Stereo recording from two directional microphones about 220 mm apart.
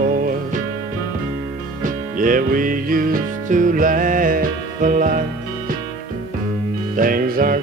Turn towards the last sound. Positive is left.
turn(degrees=-40)  # may be behind; listen again after turning